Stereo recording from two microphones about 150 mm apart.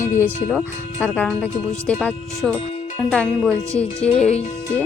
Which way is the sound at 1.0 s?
5° left (ahead or behind).